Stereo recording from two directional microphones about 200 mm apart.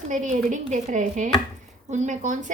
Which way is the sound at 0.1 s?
40° right (ahead or behind).